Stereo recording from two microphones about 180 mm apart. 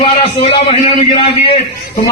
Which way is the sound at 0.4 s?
30° left (ahead or behind).